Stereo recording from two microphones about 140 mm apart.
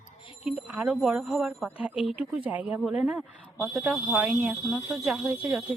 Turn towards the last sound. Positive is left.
turn(degrees=-10)  # may be behind; listen again after turning